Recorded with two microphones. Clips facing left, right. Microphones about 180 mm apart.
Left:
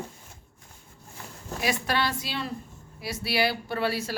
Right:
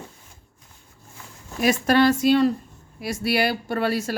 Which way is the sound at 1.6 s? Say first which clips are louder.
Right 10 dB; 45° right (ahead or behind).